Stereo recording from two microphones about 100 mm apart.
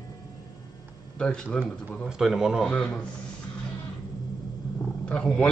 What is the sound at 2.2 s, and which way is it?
Speech, 5° right (ahead or behind).